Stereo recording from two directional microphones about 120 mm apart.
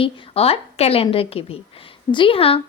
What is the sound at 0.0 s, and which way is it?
A woman's voice, 55° left (ahead or behind).